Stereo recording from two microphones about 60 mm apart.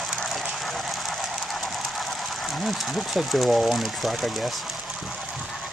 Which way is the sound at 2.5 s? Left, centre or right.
Centre.